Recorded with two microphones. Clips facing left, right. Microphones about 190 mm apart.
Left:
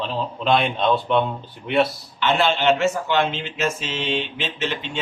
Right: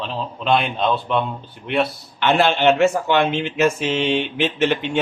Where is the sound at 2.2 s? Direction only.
55° right (ahead or behind).